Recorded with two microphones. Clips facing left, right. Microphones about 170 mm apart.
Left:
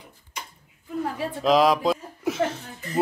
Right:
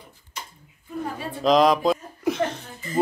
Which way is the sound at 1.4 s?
5° left (ahead or behind).